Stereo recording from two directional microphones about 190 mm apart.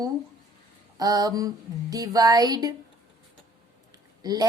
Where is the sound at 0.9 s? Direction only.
20° right (ahead or behind).